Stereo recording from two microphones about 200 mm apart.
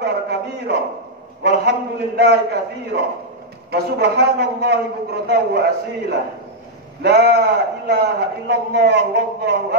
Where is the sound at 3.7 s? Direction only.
55° right (ahead or behind).